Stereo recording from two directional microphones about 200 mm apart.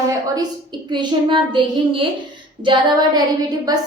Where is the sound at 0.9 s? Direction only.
25° right (ahead or behind).